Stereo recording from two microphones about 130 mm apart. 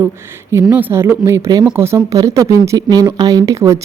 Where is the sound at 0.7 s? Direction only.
15° right (ahead or behind).